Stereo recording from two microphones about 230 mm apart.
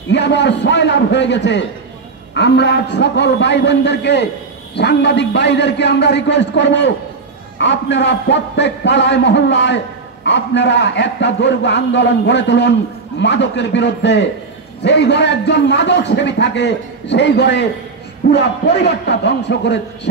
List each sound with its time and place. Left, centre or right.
0.1 s a man's voice: left